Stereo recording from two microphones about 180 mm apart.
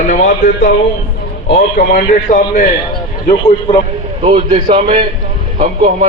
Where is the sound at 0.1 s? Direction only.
55° left (ahead or behind).